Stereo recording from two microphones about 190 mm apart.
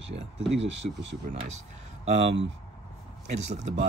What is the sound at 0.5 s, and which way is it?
Speech, 70° right (ahead or behind).